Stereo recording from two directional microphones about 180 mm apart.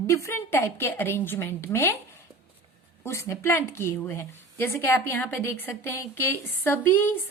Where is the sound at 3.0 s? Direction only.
15° left (ahead or behind).